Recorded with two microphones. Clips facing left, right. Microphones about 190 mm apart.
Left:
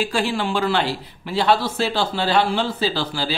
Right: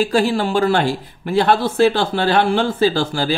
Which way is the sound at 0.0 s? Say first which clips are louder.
Right 6 dB; 40° right (ahead or behind).